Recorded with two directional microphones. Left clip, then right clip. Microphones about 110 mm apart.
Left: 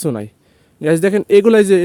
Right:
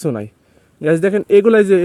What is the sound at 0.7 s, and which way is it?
Speech, 30° left (ahead or behind).